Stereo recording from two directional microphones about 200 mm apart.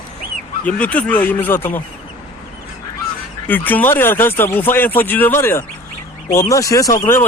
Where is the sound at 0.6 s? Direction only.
5° left (ahead or behind).